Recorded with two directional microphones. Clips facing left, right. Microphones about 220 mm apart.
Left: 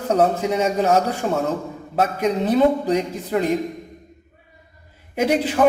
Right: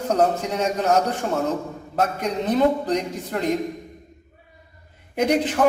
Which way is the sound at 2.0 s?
10° left (ahead or behind).